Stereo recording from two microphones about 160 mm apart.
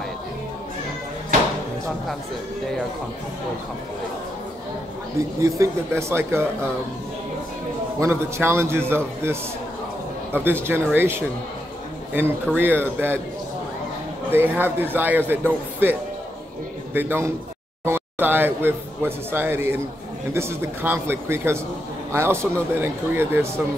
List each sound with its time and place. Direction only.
5.4 s a man's voice: 20° right (ahead or behind)
8.0 s a man's voice: 15° right (ahead or behind)
14.3 s a man's voice: 15° right (ahead or behind)